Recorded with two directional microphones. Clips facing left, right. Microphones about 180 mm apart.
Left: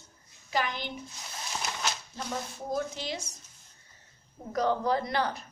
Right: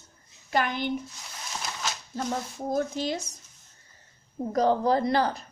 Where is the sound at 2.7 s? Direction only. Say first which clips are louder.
Right 5 dB; 45° right (ahead or behind).